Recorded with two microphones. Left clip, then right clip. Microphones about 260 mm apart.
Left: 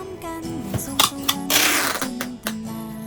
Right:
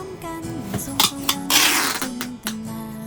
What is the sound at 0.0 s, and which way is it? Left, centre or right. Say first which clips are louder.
Music: even; centre.